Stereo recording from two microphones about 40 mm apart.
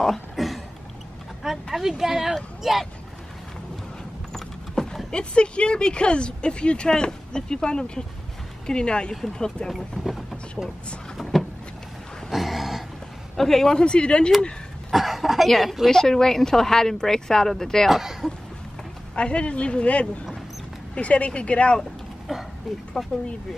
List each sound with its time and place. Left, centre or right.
0.4 s a sound: centre
1.4 s speech: centre
4.8 s a sound: centre
5.1 s speech: left
9.1 s speech: centre
12.3 s a sound: centre
13.4 s speech: centre
13.7 s speech: left
14.9 s speech: centre
15.9 s speech: centre
17.8 s speech: centre
19.1 s a woman's voice: left
22.3 s speech: centre
23.0 s speech: centre